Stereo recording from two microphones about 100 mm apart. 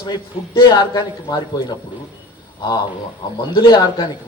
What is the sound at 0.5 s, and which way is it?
Speech, 50° left (ahead or behind).